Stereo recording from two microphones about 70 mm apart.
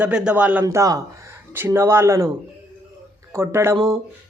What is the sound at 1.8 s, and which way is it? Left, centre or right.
Speech, right.